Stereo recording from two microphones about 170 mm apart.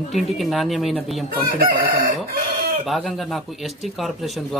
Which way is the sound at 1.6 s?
60° right (ahead or behind).